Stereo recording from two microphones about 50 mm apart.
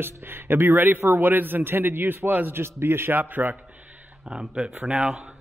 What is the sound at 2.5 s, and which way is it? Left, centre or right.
A man's voice, right.